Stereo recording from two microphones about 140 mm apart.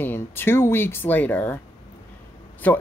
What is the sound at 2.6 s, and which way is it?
Speech, 10° left (ahead or behind).